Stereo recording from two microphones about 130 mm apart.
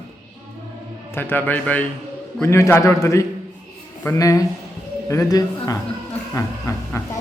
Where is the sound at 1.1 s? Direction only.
15° left (ahead or behind).